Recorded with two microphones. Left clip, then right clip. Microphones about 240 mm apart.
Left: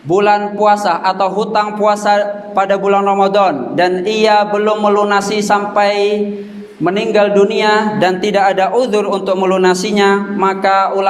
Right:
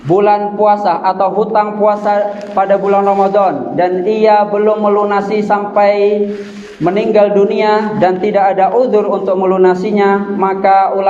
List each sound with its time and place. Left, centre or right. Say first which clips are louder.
0.1 s a man's voice: right 1 dB; left